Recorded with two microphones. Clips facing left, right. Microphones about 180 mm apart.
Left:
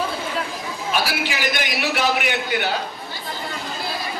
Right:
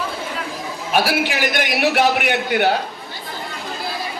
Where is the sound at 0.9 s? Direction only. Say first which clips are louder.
Right 6 dB; 60° right (ahead or behind).